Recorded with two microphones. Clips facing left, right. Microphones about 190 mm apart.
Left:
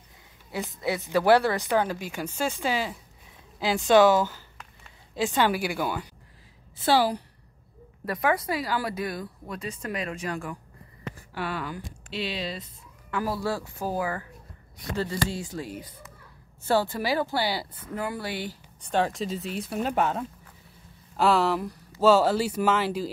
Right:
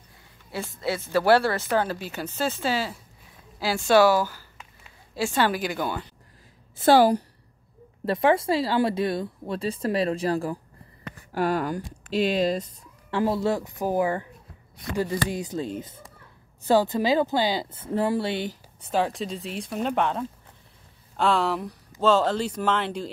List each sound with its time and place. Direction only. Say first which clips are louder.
0.5 s a woman's voice: even; 20° left (ahead or behind)
6.8 s speech: right 6 dB; 50° right (ahead or behind)
8.0 s speech: right 5 dB; 25° right (ahead or behind)
11.3 s speech: right 8 dB; 45° right (ahead or behind)
13.1 s speech: right 5 dB; 25° right (ahead or behind)
18.8 s speech: right 1 dB; centre (ahead or behind)